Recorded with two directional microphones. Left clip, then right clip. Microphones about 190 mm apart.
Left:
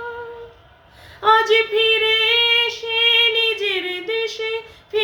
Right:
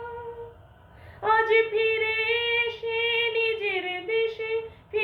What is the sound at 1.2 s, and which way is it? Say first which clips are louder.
Female singing: left 6 dB; 20° left (ahead or behind).